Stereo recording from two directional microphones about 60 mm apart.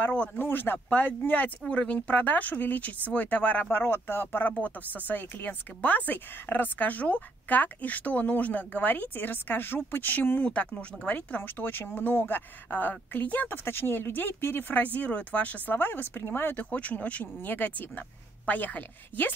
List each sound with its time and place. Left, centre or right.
0.0 s speech: centre
0.4 s speech: left
3.7 s speech: left
16.7 s speech: left